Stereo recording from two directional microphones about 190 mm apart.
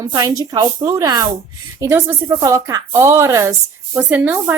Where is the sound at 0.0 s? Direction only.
20° right (ahead or behind).